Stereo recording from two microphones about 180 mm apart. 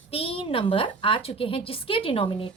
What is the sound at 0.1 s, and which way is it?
A woman's voice, 30° left (ahead or behind).